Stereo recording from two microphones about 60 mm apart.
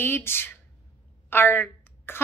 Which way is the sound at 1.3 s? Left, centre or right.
Left.